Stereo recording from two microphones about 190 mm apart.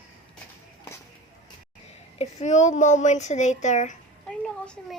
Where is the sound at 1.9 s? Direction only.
35° left (ahead or behind).